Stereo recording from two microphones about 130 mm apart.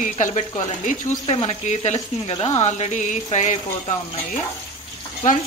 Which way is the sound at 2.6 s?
60° left (ahead or behind).